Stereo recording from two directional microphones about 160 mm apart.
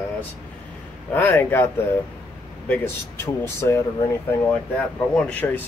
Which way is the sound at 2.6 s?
15° left (ahead or behind).